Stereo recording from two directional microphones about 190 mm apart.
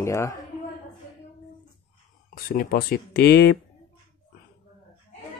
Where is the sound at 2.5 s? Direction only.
50° left (ahead or behind).